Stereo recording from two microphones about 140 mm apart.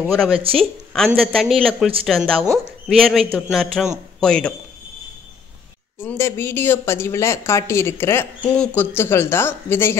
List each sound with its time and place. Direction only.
0.1 s speech: 5° left (ahead or behind)
5.9 s speech: 20° left (ahead or behind)